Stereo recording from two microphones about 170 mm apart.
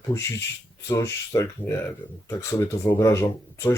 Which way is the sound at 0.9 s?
20° left (ahead or behind).